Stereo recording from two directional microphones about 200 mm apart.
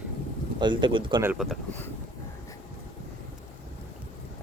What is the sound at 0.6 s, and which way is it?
Speech, 25° right (ahead or behind).